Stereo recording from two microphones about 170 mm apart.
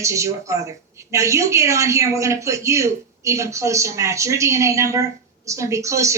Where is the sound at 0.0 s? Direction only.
15° right (ahead or behind).